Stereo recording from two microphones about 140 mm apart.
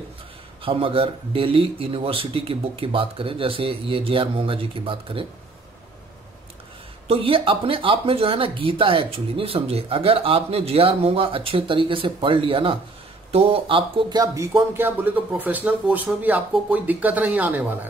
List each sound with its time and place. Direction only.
0.6 s speech: 40° right (ahead or behind)
7.1 s speech: 40° right (ahead or behind); by 17.7 s 10° right (ahead or behind)